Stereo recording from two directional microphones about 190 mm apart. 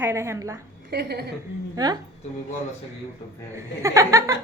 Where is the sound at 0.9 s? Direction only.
60° right (ahead or behind).